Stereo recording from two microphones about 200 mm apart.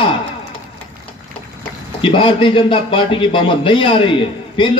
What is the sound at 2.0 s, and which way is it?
A man's voice, 25° left (ahead or behind).